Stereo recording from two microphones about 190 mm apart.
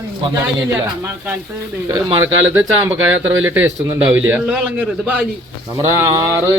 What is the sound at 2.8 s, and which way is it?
A man's voice, 10° right (ahead or behind).